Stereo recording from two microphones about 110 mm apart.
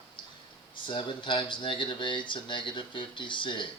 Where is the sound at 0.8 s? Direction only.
55° left (ahead or behind).